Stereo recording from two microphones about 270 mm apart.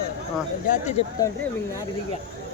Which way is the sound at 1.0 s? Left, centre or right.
Left.